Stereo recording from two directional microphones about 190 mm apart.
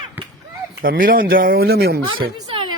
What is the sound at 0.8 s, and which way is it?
Speech, 50° right (ahead or behind).